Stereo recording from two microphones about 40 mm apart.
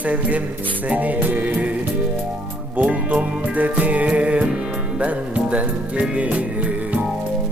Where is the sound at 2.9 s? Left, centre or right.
Right.